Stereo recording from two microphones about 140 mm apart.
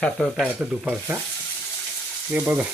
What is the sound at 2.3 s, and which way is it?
Speech, 5° right (ahead or behind).